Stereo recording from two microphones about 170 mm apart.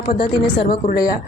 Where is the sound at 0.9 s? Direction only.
60° left (ahead or behind).